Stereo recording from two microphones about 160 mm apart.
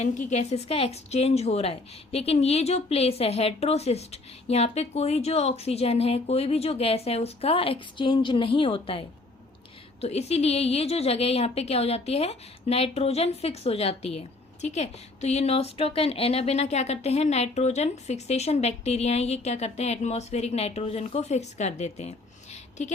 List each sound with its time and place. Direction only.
0.0 s a woman's voice: 50° left (ahead or behind)